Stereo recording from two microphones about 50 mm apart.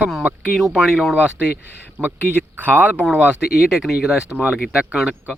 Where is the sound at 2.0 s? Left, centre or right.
Right.